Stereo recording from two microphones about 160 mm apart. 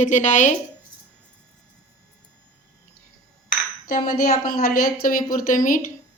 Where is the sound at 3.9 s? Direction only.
60° left (ahead or behind).